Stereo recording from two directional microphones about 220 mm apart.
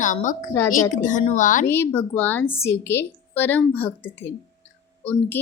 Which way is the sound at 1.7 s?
10° left (ahead or behind).